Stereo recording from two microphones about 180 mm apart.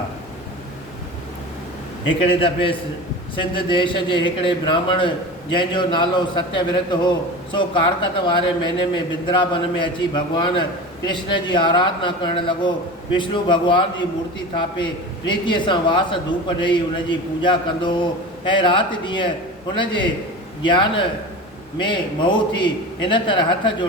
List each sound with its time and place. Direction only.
2.2 s a man's voice: 30° left (ahead or behind)